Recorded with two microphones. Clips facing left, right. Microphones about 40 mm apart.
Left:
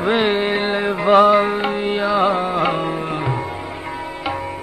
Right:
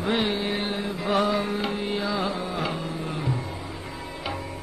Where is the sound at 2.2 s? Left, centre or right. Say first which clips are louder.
Left 11 dB; left.